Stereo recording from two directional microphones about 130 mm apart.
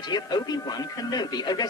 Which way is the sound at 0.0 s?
35° left (ahead or behind).